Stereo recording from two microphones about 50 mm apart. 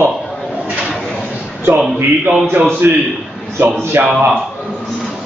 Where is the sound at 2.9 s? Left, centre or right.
Right.